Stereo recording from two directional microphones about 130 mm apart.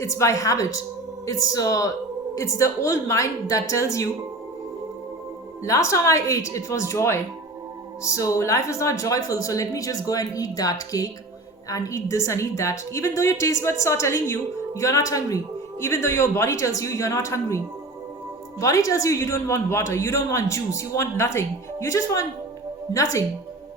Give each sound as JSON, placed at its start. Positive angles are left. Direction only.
{"t": 0.0, "sound": "a woman's voice", "side_deg": 25}
{"t": 5.6, "sound": "a woman's voice", "side_deg": 25}
{"t": 18.6, "sound": "a woman's voice", "side_deg": 25}